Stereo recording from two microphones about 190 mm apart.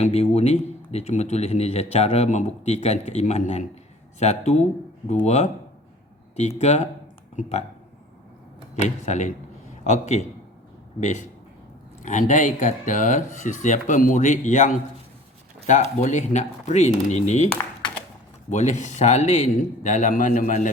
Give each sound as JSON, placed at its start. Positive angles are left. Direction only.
{"t": 0.0, "sound": "speech", "side_deg": 35}
{"t": 6.6, "sound": "speech", "side_deg": 35}
{"t": 8.7, "sound": "speech", "side_deg": 40}
{"t": 18.5, "sound": "speech", "side_deg": 40}